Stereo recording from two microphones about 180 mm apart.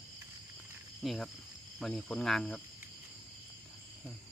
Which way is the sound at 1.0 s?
Centre (ahead or behind).